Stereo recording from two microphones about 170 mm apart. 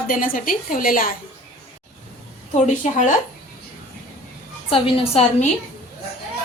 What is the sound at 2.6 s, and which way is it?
Speech, 45° left (ahead or behind).